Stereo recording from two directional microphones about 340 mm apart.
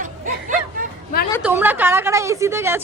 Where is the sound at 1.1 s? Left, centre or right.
Left.